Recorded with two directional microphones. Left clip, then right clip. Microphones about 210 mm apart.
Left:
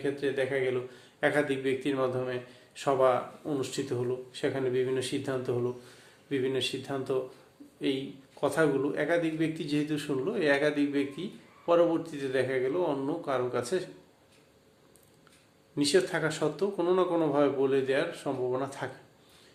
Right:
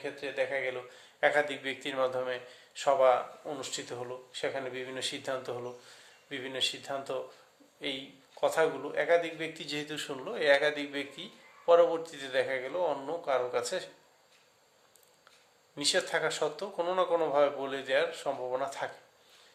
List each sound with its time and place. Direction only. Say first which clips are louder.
0.0 s a man's voice: left 4 dB; 15° right (ahead or behind)
15.7 s a man's voice: left 3 dB; 20° right (ahead or behind)